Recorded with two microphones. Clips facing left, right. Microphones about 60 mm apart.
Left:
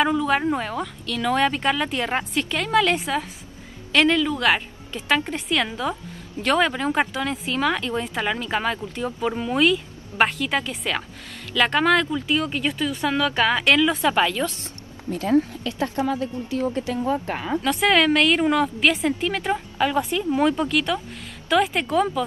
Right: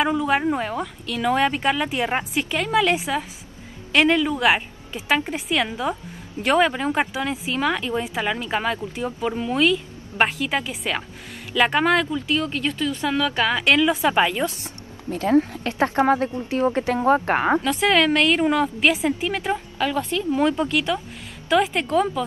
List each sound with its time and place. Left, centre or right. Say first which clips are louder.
0.0 s speech: even; centre
9.3 s a woman's voice: even; centre
14.0 s speech: right 1 dB; centre
15.5 s a woman's voice: right 4 dB; right
17.6 s a woman's voice: even; centre
19.8 s a woman's voice: left 3 dB; centre